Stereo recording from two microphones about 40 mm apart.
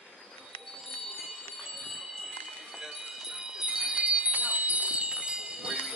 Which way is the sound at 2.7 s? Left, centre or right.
Centre.